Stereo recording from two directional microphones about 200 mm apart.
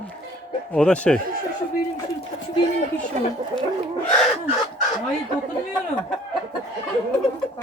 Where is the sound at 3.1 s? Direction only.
40° right (ahead or behind).